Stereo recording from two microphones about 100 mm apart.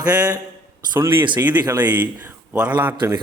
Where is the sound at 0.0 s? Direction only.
40° right (ahead or behind).